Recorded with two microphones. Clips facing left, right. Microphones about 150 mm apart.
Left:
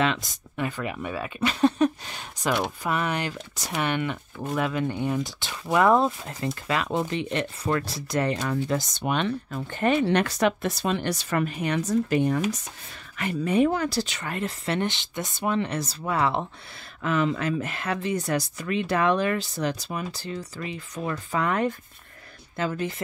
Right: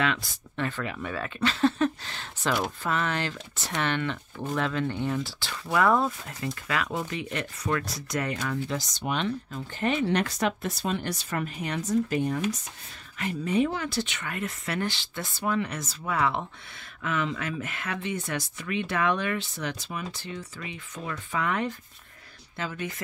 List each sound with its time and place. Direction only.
0.0 s speech: 20° left (ahead or behind)
8.6 s speech: 50° left (ahead or behind)